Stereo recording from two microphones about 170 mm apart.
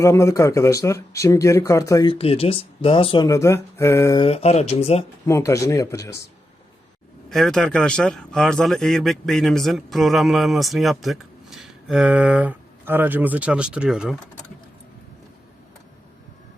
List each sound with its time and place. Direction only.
0.0 s speech: 20° left (ahead or behind)
2.0 s speech: 35° left (ahead or behind)
3.2 s speech: 15° left (ahead or behind)
4.2 s speech: 35° left (ahead or behind)
5.2 s speech: 15° left (ahead or behind)
7.3 s a man's voice: centre (ahead or behind)